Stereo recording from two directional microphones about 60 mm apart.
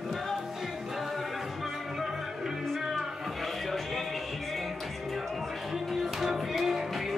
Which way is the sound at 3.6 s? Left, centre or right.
Centre.